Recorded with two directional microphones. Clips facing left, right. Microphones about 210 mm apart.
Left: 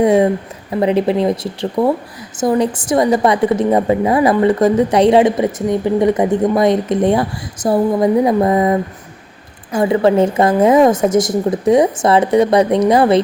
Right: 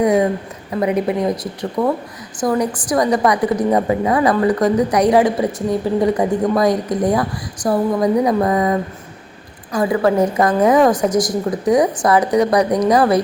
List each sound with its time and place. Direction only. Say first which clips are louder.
0.0 s a woman's voice: left 3 dB; 25° left (ahead or behind)
9.7 s a woman's voice: left 3 dB; 25° left (ahead or behind)